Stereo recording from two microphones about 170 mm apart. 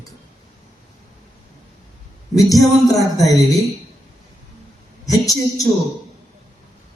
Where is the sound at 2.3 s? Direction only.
20° left (ahead or behind).